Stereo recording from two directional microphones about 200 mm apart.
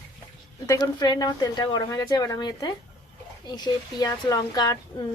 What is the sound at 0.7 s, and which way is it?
Speech, 20° left (ahead or behind).